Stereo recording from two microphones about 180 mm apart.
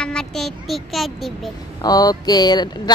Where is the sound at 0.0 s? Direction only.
5° left (ahead or behind).